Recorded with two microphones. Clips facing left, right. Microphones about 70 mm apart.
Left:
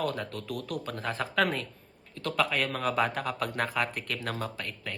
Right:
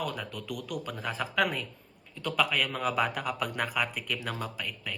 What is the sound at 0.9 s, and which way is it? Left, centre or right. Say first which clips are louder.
Speech: left 2 dB; centre.